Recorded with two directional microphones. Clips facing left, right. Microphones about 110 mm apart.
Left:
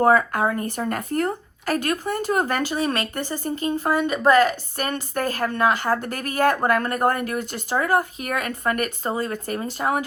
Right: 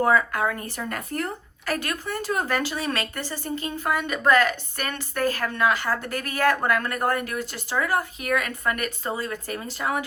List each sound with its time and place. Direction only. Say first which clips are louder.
0.0 s a woman's voice: left 3 dB; 40° left (ahead or behind)
3.7 s a woman's voice: left 5 dB; 35° left (ahead or behind)
7.9 s a woman's voice: left 2 dB; 35° left (ahead or behind)